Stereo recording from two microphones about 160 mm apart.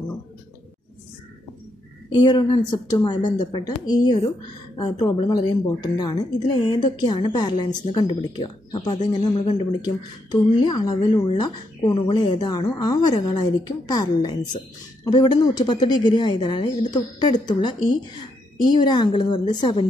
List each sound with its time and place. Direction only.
2.1 s speech: 30° left (ahead or behind)